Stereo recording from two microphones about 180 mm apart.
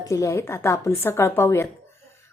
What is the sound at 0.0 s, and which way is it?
A woman's voice, 15° left (ahead or behind).